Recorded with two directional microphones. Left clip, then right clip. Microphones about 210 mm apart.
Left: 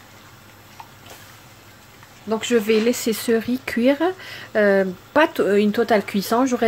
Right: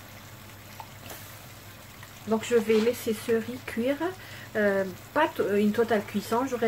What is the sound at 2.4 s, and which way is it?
Speech, 40° left (ahead or behind).